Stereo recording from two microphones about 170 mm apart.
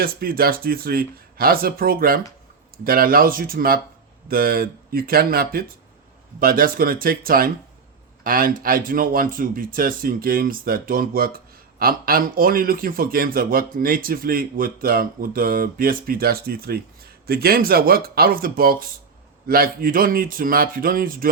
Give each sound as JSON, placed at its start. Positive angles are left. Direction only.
{"t": 0.0, "sound": "speech", "side_deg": -60}